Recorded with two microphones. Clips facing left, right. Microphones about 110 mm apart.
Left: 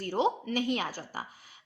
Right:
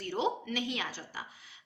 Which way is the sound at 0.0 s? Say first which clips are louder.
Left 4 dB; 35° left (ahead or behind).